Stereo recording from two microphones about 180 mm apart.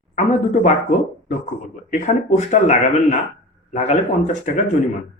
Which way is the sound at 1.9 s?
40° left (ahead or behind).